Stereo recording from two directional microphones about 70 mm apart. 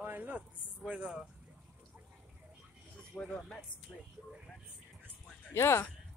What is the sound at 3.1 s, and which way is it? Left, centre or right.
Speech, centre.